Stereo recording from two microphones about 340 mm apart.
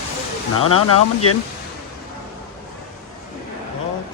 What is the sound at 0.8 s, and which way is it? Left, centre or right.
Speech, left.